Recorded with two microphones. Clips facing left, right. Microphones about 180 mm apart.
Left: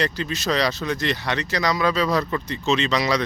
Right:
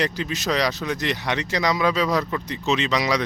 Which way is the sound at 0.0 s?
15° right (ahead or behind).